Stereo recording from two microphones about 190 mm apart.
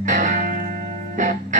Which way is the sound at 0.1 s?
45° right (ahead or behind).